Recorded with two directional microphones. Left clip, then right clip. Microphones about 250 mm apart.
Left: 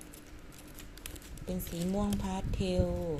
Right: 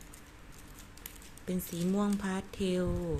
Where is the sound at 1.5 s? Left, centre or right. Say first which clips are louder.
Right 2 dB; centre.